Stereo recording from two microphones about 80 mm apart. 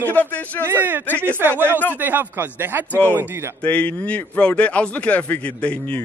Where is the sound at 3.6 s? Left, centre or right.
Centre.